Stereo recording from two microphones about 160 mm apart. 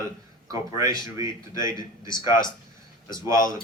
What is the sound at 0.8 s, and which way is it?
Speech, 20° right (ahead or behind).